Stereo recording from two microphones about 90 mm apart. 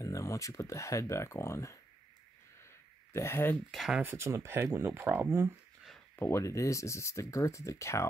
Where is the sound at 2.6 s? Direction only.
30° left (ahead or behind).